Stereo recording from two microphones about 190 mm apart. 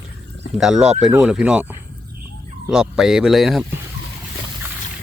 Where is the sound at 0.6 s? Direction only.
5° right (ahead or behind).